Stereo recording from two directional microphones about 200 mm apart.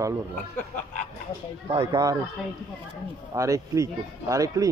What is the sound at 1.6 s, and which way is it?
Speech, 20° right (ahead or behind).